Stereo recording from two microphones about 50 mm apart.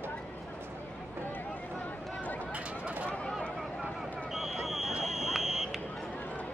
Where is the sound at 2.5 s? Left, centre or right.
Right.